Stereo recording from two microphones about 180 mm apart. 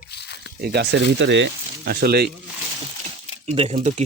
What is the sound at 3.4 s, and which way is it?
Speech, 35° right (ahead or behind).